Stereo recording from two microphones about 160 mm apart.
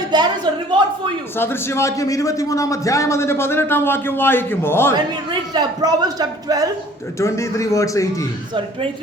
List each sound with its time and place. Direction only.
0.1 s a sound: 25° right (ahead or behind)
1.4 s a man's voice: 15° left (ahead or behind)
5.3 s speech: 25° right (ahead or behind)
7.2 s a man's voice: 20° left (ahead or behind)